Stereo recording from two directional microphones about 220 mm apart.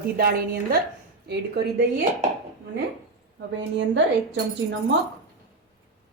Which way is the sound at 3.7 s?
55° right (ahead or behind).